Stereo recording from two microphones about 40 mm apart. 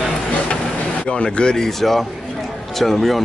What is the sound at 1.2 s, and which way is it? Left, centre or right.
Speech, centre.